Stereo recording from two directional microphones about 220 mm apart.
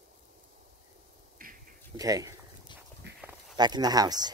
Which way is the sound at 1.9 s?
15° right (ahead or behind).